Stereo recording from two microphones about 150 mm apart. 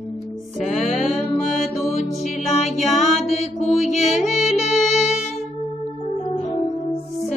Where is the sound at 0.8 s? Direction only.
55° left (ahead or behind).